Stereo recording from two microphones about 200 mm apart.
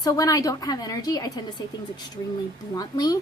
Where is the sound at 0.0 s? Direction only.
15° left (ahead or behind).